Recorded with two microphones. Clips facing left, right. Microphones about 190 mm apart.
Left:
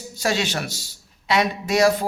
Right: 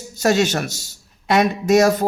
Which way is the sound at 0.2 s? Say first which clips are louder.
Right 6 dB; 45° right (ahead or behind).